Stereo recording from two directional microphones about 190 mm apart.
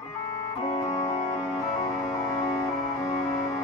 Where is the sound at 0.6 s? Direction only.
20° left (ahead or behind).